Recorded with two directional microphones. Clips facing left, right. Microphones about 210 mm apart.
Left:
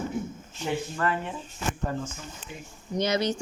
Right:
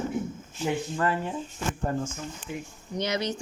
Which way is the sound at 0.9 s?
20° right (ahead or behind).